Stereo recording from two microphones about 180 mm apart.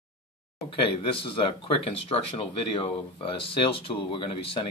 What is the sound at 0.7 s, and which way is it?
Speech, 30° left (ahead or behind).